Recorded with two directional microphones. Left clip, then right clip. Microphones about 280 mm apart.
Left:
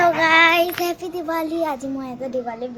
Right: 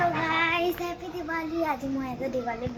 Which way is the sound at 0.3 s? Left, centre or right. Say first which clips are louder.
Left 11 dB; centre.